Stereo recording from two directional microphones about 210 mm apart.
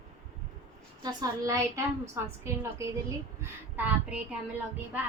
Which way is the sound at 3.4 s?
5° right (ahead or behind).